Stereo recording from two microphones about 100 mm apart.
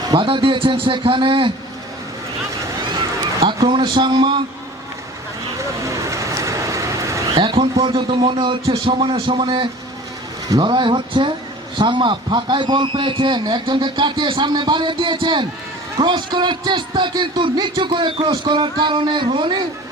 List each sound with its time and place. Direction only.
0.2 s a man's voice: 60° right (ahead or behind)
3.7 s speech: 55° right (ahead or behind)
5.8 s vehicle: 30° right (ahead or behind)
7.3 s a man's voice: 65° right (ahead or behind)
18.4 s speech: 50° right (ahead or behind)